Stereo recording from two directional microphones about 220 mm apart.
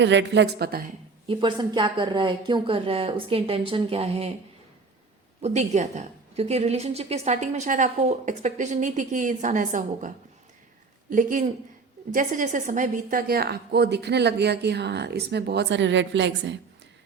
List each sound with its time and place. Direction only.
0.0 s a woman's voice: 55° right (ahead or behind)
1.3 s speech: 20° right (ahead or behind)
5.4 s a woman's voice: 30° right (ahead or behind)
11.1 s a woman's voice: 35° right (ahead or behind); by 16.6 s 55° right (ahead or behind)